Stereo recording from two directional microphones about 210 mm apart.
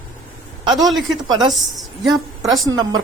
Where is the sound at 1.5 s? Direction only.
Centre (ahead or behind).